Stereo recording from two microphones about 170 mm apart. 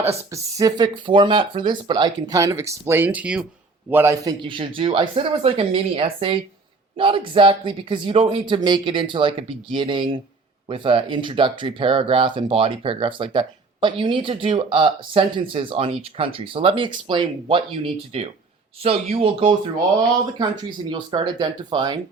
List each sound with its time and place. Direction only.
0.3 s speech: 20° right (ahead or behind)
20.9 s speech: 25° right (ahead or behind)